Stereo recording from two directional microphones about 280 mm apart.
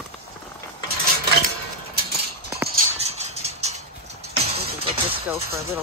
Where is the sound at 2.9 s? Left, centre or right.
Right.